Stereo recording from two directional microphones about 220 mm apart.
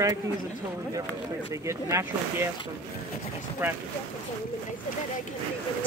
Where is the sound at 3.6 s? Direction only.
10° right (ahead or behind).